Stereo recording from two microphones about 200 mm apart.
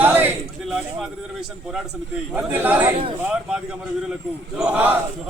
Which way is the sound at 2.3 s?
10° right (ahead or behind).